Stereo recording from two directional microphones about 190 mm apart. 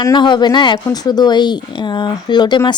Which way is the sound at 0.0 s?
25° left (ahead or behind).